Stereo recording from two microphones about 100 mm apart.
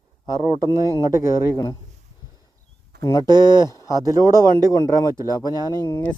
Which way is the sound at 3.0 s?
35° left (ahead or behind).